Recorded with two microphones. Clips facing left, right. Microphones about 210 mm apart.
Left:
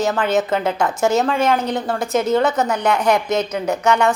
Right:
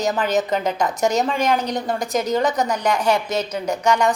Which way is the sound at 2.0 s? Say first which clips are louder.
Left 5 dB; 35° right (ahead or behind).